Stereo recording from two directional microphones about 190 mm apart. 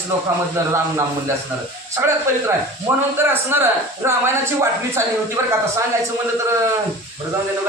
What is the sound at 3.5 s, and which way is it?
Speech, 10° right (ahead or behind).